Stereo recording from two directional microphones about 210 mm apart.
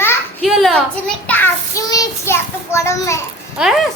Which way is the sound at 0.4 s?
Centre (ahead or behind).